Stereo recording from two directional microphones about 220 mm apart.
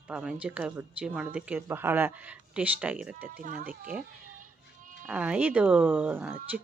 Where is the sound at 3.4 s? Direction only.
40° right (ahead or behind).